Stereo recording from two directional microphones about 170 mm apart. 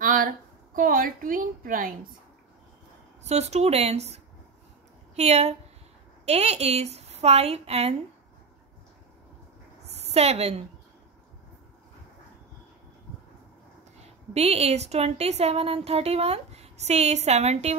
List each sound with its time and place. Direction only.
0.0 s a sound: 55° right (ahead or behind)
0.7 s a woman's voice: 55° right (ahead or behind)
3.3 s speech: 40° right (ahead or behind)
9.9 s a woman's voice: 40° right (ahead or behind)
13.9 s speech: 40° right (ahead or behind)